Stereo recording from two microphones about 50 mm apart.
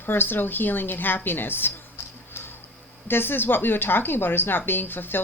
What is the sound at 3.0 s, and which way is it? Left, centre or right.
Speech, left.